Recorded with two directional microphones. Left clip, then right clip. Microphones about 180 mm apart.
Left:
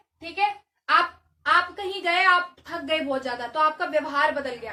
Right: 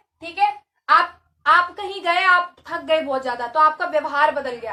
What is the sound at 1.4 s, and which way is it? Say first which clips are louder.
A woman's voice: right 5 dB; 10° left (ahead or behind).